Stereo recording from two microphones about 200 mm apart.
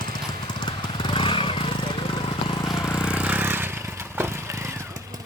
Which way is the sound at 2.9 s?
5° right (ahead or behind).